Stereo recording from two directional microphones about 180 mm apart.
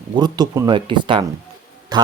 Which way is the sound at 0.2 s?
20° right (ahead or behind).